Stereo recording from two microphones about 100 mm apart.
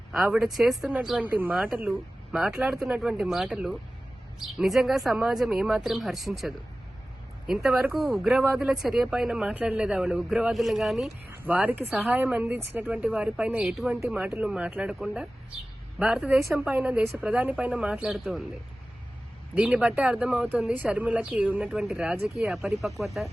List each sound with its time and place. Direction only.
0.3 s speech: 5° right (ahead or behind)
1.2 s speech: 15° right (ahead or behind)
1.9 s speech: centre (ahead or behind)
11.4 s speech: 15° right (ahead or behind); by 18.4 s centre (ahead or behind)
19.5 s speech: 10° right (ahead or behind)